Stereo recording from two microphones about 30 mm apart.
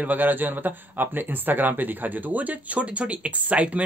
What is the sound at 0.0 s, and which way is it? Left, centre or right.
Speech, right.